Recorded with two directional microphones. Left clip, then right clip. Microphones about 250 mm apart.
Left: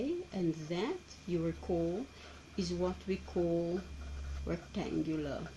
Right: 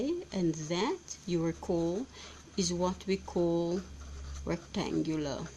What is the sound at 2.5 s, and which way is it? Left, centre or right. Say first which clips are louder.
Speech: right 4 dB; right.